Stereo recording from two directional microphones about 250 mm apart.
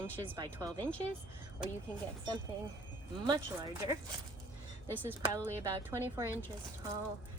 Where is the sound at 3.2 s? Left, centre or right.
Centre.